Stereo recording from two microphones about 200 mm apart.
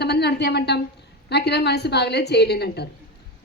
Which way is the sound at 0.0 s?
55° left (ahead or behind).